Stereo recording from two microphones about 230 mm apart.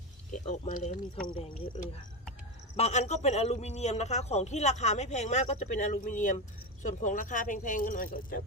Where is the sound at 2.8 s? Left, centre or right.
Left.